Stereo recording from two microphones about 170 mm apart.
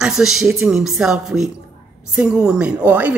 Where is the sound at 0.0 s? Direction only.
5° right (ahead or behind).